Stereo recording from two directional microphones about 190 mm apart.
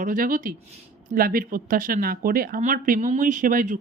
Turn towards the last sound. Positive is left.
turn(degrees=-45)  # may be behind; listen again after turning